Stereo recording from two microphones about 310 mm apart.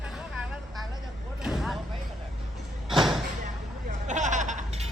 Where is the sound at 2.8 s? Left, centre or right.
Centre.